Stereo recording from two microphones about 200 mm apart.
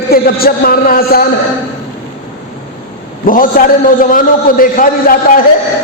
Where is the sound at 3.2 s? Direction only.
45° left (ahead or behind).